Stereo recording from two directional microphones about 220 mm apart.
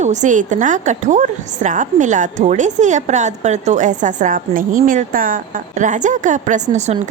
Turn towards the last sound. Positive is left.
turn(degrees=-30)  # may be behind; listen again after turning